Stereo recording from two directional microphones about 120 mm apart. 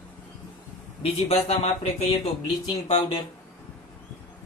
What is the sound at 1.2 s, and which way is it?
Speech, 65° left (ahead or behind).